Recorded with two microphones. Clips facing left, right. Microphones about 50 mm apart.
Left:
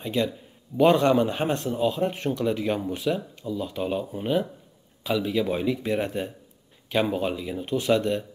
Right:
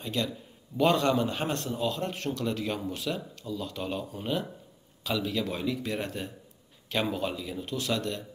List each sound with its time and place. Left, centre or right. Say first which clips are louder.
0.0 s a man's voice: left 6 dB; centre